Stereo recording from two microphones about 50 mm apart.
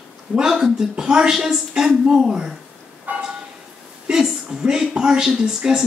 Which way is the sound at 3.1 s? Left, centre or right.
Right.